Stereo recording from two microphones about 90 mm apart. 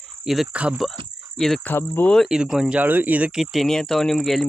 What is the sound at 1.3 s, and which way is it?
Cricket, 5° left (ahead or behind).